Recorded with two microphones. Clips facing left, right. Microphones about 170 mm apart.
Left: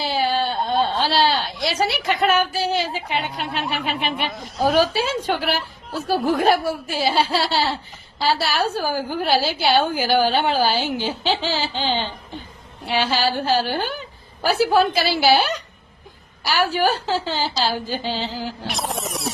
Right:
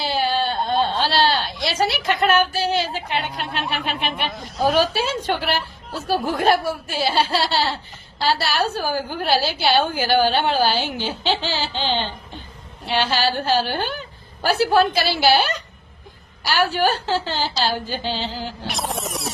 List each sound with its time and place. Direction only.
0.0 s a woman's voice: centre (ahead or behind)